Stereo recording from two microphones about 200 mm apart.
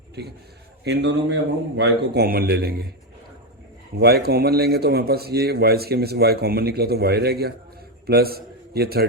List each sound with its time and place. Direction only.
0.2 s a man's voice: 55° right (ahead or behind)
3.9 s a man's voice: 50° right (ahead or behind)